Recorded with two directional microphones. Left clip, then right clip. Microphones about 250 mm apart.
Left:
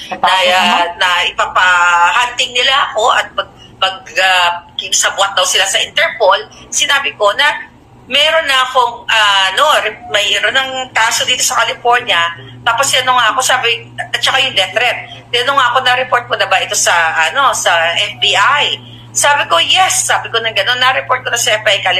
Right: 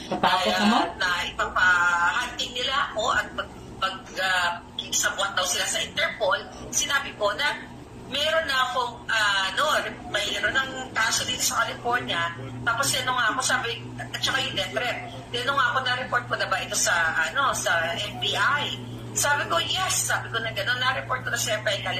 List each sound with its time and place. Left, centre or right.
0.5 s a man's voice: left